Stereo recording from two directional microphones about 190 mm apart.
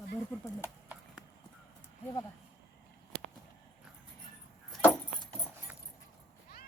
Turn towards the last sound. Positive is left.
turn(degrees=5)  # may be behind; listen again after turning